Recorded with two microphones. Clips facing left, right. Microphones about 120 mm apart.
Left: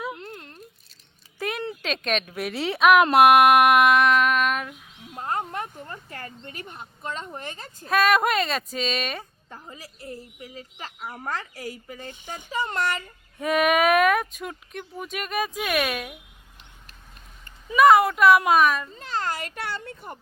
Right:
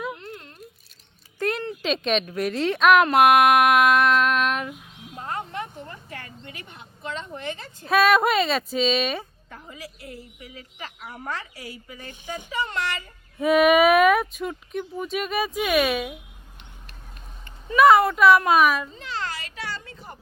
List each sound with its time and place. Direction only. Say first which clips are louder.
1.4 s a sound: right 4 dB; 5° left (ahead or behind)
1.8 s a woman's voice: right 5 dB; centre (ahead or behind)
5.2 s a sound: left 2 dB; 40° left (ahead or behind)
7.9 s a woman's voice: right 2 dB; centre (ahead or behind)
11.3 s a child's voice: left 2 dB; 45° left (ahead or behind)
13.4 s a woman's voice: right 4 dB; centre (ahead or behind)
17.7 s a woman's voice: even; centre (ahead or behind)
18.9 s a child's voice: left 3 dB; 45° left (ahead or behind)